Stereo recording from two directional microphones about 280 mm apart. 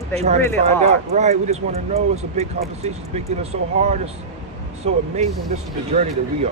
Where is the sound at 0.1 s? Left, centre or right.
Right.